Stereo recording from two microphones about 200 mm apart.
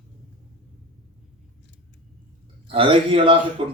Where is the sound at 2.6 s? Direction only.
25° right (ahead or behind).